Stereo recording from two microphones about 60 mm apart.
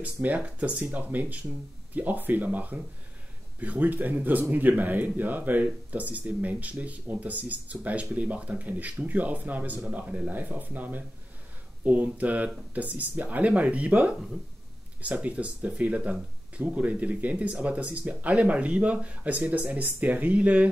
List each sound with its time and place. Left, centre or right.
0.0 s speech: right